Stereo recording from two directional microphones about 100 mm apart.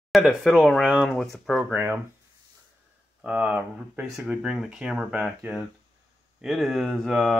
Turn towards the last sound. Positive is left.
turn(degrees=-5)  # may be behind; listen again after turning